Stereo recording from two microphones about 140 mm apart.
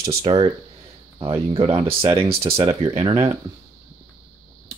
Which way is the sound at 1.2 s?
40° right (ahead or behind).